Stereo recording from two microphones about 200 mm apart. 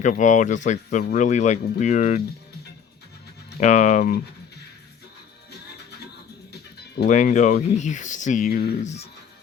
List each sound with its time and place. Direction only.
0.0 s speech: 40° left (ahead or behind)
3.6 s speech: 35° left (ahead or behind)
6.5 s music: 55° left (ahead or behind)
7.1 s speech: 35° left (ahead or behind)